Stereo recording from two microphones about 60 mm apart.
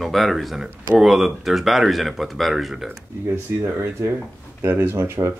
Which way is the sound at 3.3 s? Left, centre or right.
Right.